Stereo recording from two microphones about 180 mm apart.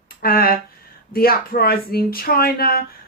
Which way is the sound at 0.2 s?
55° left (ahead or behind).